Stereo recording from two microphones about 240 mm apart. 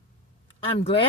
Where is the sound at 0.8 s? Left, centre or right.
Left.